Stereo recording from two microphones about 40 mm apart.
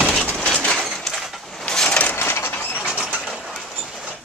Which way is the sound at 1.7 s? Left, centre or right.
Left.